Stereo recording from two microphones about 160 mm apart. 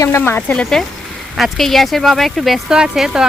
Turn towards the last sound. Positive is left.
turn(degrees=-5)  # may be behind; listen again after turning